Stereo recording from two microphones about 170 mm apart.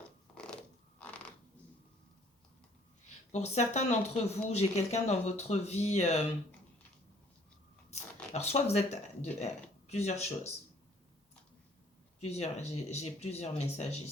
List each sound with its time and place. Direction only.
0.3 s a sound: 5° left (ahead or behind)
3.3 s speech: 40° left (ahead or behind)
7.9 s speech: 40° left (ahead or behind)
12.3 s speech: 40° left (ahead or behind)